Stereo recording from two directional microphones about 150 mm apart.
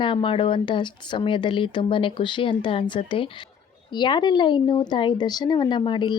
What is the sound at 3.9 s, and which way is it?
Speech, 30° left (ahead or behind).